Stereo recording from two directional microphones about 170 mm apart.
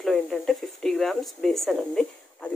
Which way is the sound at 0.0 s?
Centre (ahead or behind).